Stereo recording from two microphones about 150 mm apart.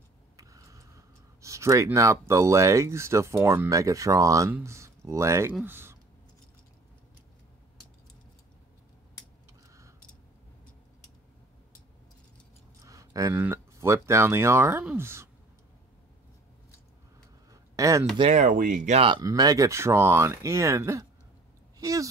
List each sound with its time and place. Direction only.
0.4 s speech: 20° right (ahead or behind)
12.8 s speech: 20° right (ahead or behind)
17.5 s a sound: 20° right (ahead or behind)
18.1 s speech: 40° right (ahead or behind)
18.4 s speech: 65° right (ahead or behind)
18.9 s speech: 35° right (ahead or behind)
19.2 s speech: 25° right (ahead or behind)